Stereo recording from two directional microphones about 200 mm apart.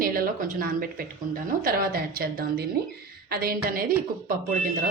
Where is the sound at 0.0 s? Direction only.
45° right (ahead or behind).